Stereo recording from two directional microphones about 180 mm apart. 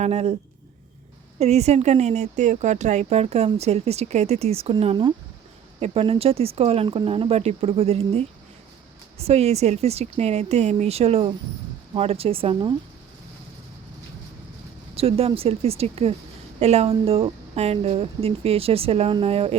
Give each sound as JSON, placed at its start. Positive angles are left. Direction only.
{"t": 0.0, "sound": "speech", "side_deg": -35}
{"t": 1.4, "sound": "speech", "side_deg": -35}
{"t": 14.9, "sound": "speech", "side_deg": -35}